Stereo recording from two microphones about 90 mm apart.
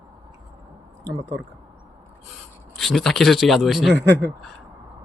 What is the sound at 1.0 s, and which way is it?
Speech, 45° right (ahead or behind).